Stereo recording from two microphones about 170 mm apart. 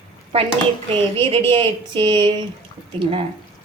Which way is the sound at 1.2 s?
30° right (ahead or behind).